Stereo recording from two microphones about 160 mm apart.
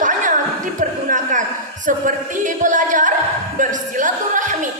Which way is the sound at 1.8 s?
55° right (ahead or behind).